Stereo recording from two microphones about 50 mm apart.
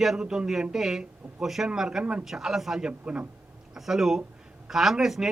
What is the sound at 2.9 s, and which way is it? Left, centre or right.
Speech, right.